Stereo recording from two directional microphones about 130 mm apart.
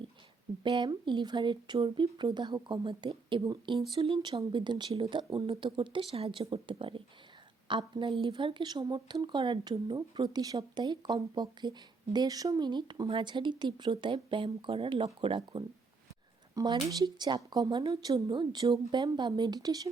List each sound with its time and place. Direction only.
0.6 s speech: 40° right (ahead or behind)
16.6 s speech: 30° right (ahead or behind)